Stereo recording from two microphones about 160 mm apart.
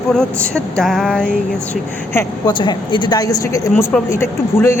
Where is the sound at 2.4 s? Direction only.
30° left (ahead or behind).